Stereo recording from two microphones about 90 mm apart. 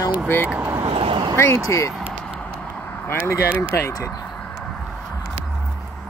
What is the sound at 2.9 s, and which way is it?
Speech, 25° left (ahead or behind).